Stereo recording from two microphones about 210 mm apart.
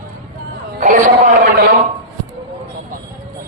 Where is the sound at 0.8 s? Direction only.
35° right (ahead or behind).